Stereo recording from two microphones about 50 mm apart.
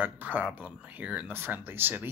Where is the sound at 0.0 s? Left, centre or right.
Right.